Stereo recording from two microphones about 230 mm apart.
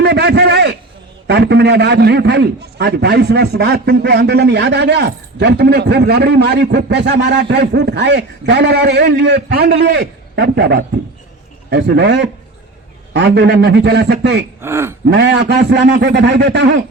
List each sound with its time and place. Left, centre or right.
0.0 s a sound: right
1.3 s a man's voice: right
14.6 s speech: centre
15.1 s a man's voice: right